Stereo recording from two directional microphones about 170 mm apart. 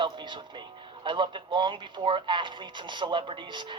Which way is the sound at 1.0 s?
30° right (ahead or behind).